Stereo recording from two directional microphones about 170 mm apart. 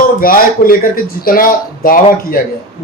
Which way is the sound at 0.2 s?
55° left (ahead or behind).